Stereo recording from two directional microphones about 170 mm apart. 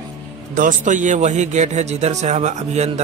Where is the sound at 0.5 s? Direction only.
50° right (ahead or behind).